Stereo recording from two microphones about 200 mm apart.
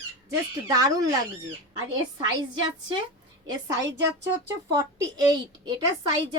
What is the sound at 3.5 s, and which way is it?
Speech, 15° right (ahead or behind).